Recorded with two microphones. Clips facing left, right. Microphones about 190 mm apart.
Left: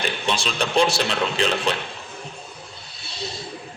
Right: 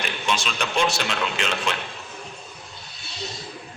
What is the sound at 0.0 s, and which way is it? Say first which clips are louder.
A man's voice: left 2 dB; 35° left (ahead or behind).